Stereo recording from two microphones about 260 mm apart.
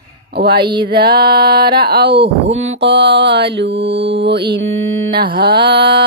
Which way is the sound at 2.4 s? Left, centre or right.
Right.